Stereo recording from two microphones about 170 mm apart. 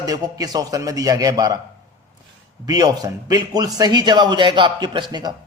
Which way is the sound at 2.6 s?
20° right (ahead or behind).